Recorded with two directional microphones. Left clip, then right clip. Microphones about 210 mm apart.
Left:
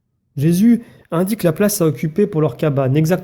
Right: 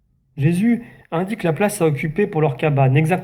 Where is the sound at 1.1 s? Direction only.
55° left (ahead or behind).